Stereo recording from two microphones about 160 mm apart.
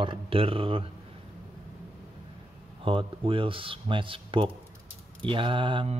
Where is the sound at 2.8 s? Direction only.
35° right (ahead or behind).